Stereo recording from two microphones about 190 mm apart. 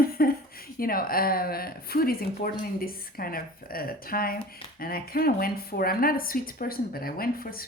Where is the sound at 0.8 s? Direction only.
50° left (ahead or behind).